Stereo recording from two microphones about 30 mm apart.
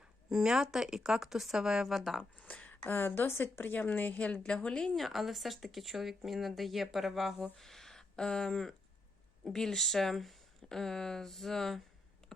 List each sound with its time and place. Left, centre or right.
0.3 s speech: centre
1.9 s speech: centre
2.6 s a sound: left
3.8 s a woman's voice: left
4.3 s speech: left
4.9 s speech: centre
7.6 s a sound: centre
8.1 s speech: left